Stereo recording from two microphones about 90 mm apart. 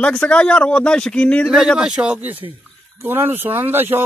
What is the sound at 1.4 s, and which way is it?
Speech, centre (ahead or behind).